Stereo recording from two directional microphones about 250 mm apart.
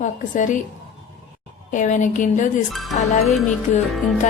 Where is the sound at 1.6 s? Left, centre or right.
Left.